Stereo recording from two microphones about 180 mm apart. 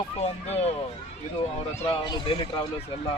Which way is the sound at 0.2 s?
35° left (ahead or behind).